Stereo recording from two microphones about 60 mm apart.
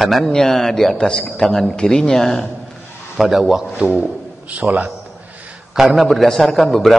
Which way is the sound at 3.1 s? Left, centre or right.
Centre.